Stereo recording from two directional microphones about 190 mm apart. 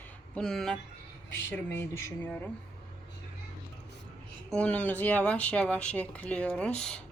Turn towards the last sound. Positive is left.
turn(degrees=5)  # may be behind; listen again after turning